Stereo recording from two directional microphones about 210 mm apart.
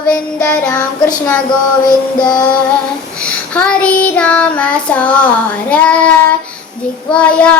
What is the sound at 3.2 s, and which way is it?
Child singing, 5° left (ahead or behind).